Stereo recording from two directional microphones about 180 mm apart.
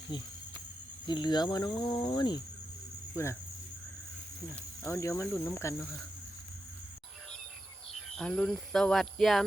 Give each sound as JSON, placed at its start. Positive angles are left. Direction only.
{"t": 1.0, "sound": "cricket", "side_deg": 25}
{"t": 4.9, "sound": "cricket", "side_deg": 15}
{"t": 8.1, "sound": "speech", "side_deg": 0}